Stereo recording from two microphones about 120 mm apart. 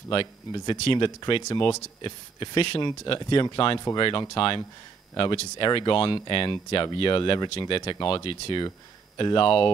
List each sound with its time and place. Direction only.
0.1 s speech: 45° left (ahead or behind)